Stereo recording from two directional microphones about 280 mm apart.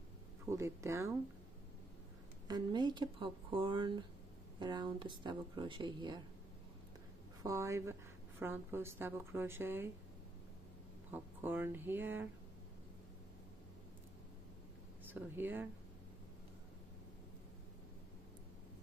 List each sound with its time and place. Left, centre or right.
0.5 s speech: centre
2.4 s speech: centre
7.4 s speech: centre
11.1 s speech: centre
15.0 s speech: centre